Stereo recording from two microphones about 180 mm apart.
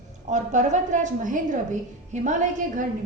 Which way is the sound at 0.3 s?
40° right (ahead or behind).